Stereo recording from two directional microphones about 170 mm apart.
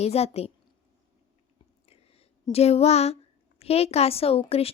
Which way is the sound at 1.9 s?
35° left (ahead or behind).